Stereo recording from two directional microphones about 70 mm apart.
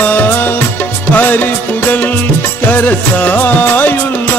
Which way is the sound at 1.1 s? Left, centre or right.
Left.